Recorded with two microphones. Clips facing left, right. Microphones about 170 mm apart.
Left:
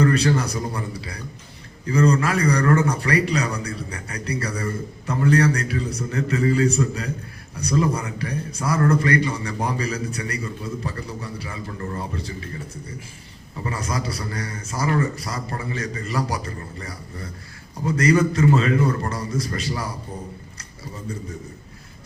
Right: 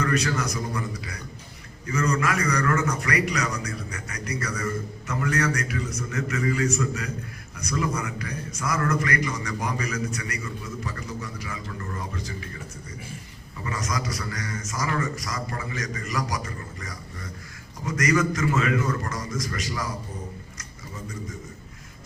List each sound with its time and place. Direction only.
0.0 s a man's voice: 30° left (ahead or behind)
13.7 s a man's voice: 30° left (ahead or behind)